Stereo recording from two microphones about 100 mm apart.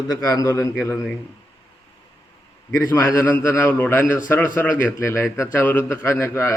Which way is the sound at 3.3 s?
20° left (ahead or behind).